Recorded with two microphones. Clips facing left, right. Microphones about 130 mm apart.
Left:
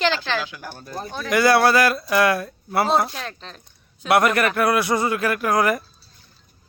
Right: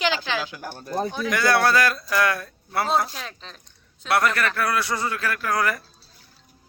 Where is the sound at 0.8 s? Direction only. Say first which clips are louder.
Right 7 dB; 30° right (ahead or behind).